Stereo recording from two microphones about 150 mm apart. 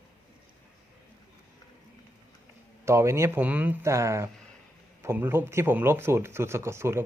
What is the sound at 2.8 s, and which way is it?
Speech, 20° right (ahead or behind).